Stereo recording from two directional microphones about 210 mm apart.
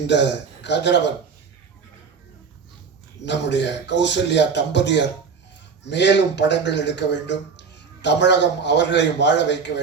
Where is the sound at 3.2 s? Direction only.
55° left (ahead or behind).